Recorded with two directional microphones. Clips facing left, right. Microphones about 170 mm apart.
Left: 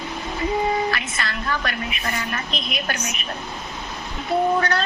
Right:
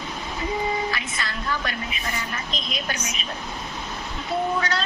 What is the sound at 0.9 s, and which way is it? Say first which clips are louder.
A woman's voice: left 3 dB; 65° left (ahead or behind).